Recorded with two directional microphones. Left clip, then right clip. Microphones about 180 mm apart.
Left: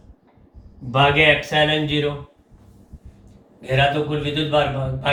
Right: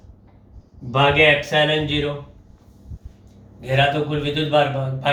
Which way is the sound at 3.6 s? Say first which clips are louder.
Even; 45° right (ahead or behind).